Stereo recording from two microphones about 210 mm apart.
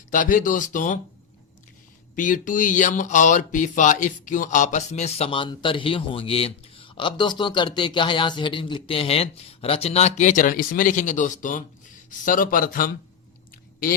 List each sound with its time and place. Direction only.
0.1 s speech: 40° left (ahead or behind)
2.1 s speech: 40° left (ahead or behind)